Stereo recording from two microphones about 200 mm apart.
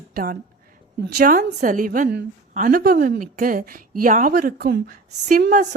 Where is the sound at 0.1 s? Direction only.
45° right (ahead or behind).